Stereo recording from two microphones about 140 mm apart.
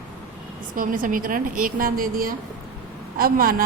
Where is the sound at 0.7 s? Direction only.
80° right.